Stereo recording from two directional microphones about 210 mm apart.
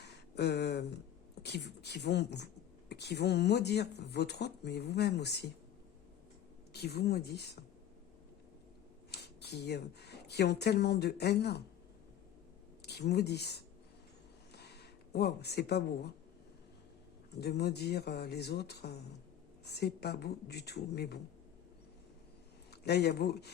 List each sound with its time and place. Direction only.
0.0 s a sound: 55° left (ahead or behind)
1.4 s speech: 55° left (ahead or behind)
6.7 s speech: 50° left (ahead or behind)
9.1 s speech: 50° left (ahead or behind)
12.8 s speech: 50° left (ahead or behind)
14.5 s a sound: 50° left (ahead or behind)
17.4 s speech: 50° left (ahead or behind)
22.7 s speech: 50° left (ahead or behind)